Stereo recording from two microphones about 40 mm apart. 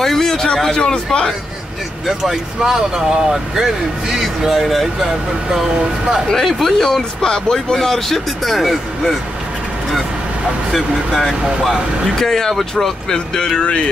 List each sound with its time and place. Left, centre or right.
0.0 s a sound: centre
0.6 s a man's voice: centre
2.0 s speech: centre
4.5 s speech: centre
5.0 s speech: centre
6.3 s speech: centre
10.7 s speech: centre
12.2 s speech: centre